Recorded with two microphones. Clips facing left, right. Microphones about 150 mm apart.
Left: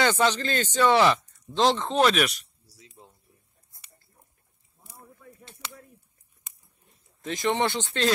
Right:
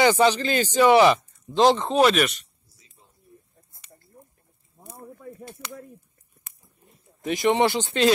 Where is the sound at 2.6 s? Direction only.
80° left.